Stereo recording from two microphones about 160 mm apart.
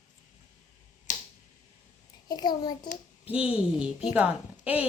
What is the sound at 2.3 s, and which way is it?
Speech, 25° left (ahead or behind).